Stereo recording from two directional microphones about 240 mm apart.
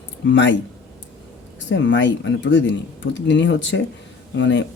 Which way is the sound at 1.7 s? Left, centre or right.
Left.